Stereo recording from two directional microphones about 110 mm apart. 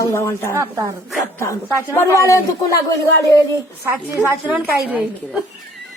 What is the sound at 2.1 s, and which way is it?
Speech, 30° left (ahead or behind).